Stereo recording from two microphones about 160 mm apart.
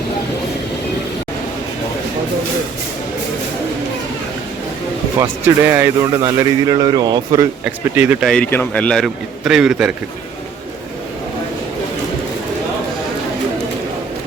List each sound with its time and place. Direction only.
5.2 s speech: 15° right (ahead or behind)
6.1 s a man's voice: 25° right (ahead or behind)
7.9 s speech: 10° right (ahead or behind)
8.3 s a man's voice: 10° left (ahead or behind)